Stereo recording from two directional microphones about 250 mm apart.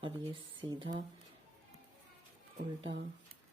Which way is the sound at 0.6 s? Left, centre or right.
Centre.